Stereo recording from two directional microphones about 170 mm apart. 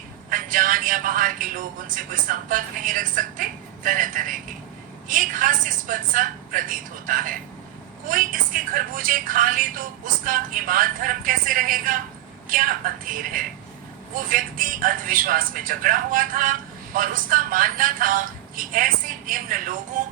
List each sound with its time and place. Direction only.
0.3 s a man's voice: 55° right (ahead or behind)